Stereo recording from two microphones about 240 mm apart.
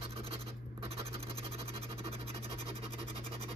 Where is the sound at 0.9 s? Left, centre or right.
Right.